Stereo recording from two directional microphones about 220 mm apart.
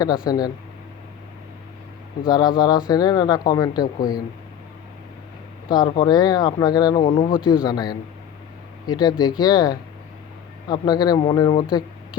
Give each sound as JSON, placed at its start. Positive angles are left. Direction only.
{"t": 0.3, "sound": "speech", "side_deg": 15}
{"t": 2.2, "sound": "speech", "side_deg": 20}
{"t": 5.6, "sound": "speech", "side_deg": 15}